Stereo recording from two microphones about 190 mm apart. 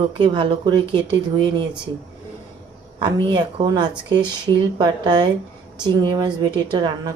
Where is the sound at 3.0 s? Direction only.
25° right (ahead or behind).